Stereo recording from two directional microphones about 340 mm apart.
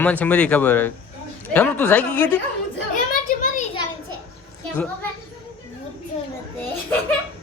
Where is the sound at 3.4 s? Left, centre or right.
Left.